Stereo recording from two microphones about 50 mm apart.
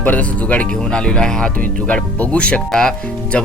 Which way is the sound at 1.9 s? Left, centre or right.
Left.